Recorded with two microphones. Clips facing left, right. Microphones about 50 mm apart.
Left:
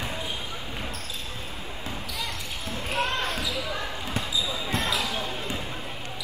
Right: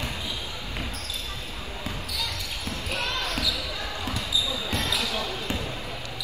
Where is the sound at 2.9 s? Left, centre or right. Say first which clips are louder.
Left 4 dB; left.